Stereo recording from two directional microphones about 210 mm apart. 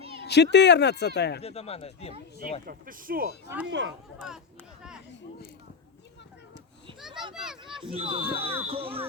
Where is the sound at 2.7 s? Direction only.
45° right (ahead or behind).